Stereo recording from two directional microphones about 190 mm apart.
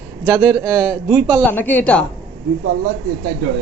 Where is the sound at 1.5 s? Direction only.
10° left (ahead or behind).